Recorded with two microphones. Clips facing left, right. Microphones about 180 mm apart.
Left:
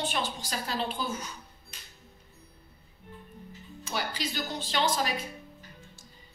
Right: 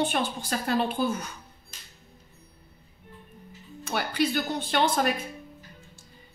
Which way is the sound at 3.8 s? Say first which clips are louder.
Right 7 dB; 60° right (ahead or behind).